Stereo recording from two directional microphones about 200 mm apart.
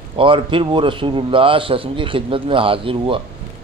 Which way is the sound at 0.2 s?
25° right (ahead or behind).